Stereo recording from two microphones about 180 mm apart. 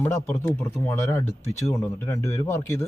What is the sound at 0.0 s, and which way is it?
Speech, 15° left (ahead or behind).